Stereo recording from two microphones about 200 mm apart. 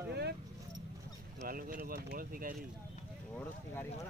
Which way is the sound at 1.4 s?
45° right (ahead or behind).